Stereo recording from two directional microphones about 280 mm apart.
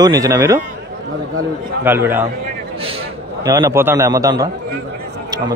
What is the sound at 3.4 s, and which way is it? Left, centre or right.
A man's voice, centre.